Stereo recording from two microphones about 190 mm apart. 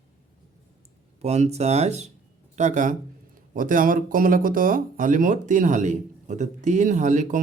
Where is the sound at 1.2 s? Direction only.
35° right (ahead or behind).